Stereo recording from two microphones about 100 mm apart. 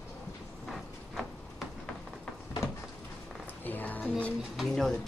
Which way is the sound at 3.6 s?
15° left (ahead or behind).